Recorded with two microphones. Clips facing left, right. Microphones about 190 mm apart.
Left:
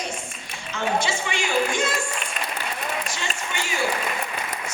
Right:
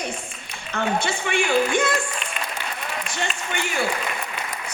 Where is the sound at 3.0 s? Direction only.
60° right (ahead or behind).